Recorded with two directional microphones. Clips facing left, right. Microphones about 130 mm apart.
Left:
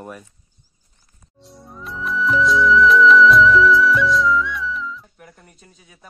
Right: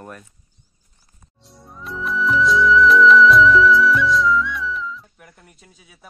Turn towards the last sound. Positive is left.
turn(degrees=-5)  # may be behind; listen again after turning